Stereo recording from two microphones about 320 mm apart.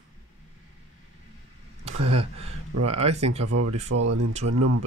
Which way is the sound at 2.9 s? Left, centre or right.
Centre.